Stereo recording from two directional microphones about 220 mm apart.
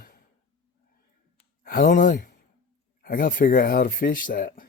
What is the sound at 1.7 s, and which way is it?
Speech, 40° left (ahead or behind).